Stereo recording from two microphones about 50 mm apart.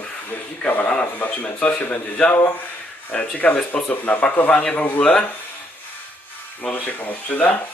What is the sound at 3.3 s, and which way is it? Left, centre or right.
A man's voice, left.